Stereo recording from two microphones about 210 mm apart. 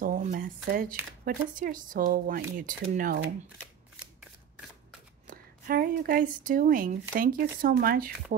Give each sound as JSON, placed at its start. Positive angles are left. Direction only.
{"t": 0.0, "sound": "speech", "side_deg": -40}
{"t": 5.2, "sound": "speech", "side_deg": -45}